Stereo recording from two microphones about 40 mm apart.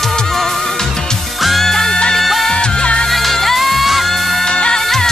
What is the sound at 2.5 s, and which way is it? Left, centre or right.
Music, left.